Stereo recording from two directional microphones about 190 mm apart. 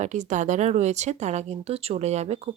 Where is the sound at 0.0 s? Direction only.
40° right (ahead or behind).